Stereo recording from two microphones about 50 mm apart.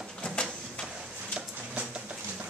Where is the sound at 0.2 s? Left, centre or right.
Centre.